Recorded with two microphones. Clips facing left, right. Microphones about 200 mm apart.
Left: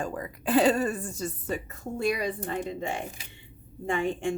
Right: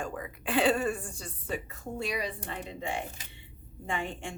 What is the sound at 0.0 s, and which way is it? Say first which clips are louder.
A woman's voice: left 4 dB; 40° left (ahead or behind).